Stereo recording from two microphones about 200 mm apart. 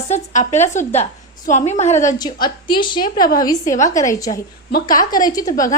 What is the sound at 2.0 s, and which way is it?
Speech, 20° left (ahead or behind).